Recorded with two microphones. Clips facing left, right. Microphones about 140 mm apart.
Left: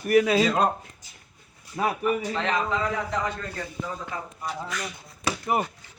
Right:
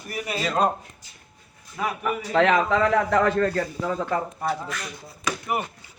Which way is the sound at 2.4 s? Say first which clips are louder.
Right 7 dB; 85° right.